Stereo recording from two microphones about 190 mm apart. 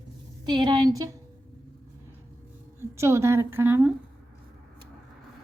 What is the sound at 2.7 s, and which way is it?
A woman's voice, 15° right (ahead or behind).